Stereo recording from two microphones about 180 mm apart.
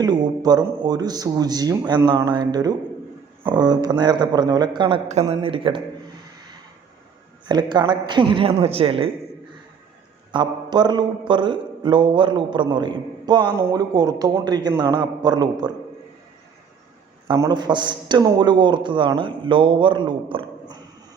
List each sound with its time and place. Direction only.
0.0 s speech: 25° right (ahead or behind)
7.4 s speech: 25° right (ahead or behind)
10.3 s speech: 25° right (ahead or behind)
17.2 s speech: 20° right (ahead or behind)